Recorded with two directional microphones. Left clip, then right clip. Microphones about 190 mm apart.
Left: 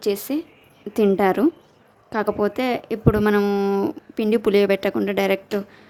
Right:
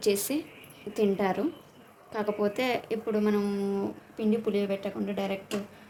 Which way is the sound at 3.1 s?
50° left (ahead or behind).